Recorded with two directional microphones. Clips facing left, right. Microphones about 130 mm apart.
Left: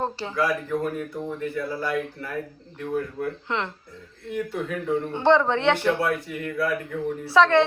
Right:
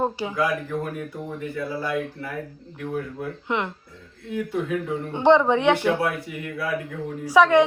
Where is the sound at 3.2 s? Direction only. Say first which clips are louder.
Right 1 dB; 15° right (ahead or behind).